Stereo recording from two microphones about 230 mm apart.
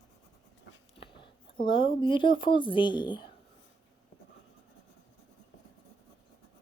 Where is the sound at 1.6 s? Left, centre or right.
Left.